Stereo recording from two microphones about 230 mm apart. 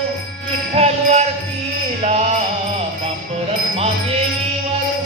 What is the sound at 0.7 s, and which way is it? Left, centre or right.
Music, right.